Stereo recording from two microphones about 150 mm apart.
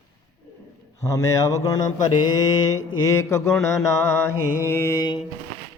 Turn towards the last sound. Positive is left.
turn(degrees=20)  # may be behind; listen again after turning